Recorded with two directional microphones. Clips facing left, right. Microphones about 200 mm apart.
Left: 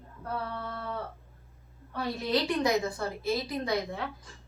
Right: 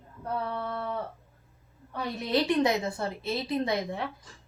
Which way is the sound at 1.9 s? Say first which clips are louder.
Right 1 dB; 25° right (ahead or behind).